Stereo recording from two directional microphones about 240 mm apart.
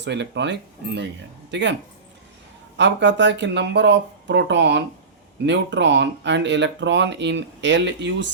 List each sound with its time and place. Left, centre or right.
0.0 s speech: right
2.7 s speech: right